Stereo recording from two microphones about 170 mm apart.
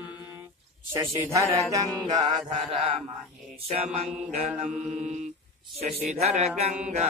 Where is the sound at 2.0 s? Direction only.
25° right (ahead or behind).